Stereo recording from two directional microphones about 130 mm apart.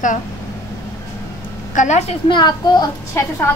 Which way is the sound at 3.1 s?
20° left (ahead or behind).